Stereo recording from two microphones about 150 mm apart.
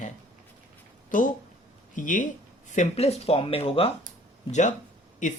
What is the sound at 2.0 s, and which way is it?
Speech, 60° left (ahead or behind).